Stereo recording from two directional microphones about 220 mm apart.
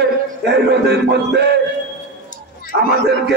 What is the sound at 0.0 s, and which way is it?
Music, 50° right (ahead or behind).